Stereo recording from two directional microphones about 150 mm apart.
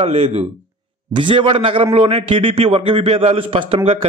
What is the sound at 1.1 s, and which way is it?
A man's voice, 35° right (ahead or behind).